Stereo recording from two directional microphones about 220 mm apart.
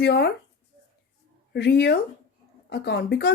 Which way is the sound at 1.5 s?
50° left (ahead or behind).